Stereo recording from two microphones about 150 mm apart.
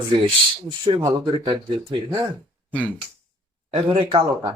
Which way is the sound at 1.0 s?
30° right (ahead or behind).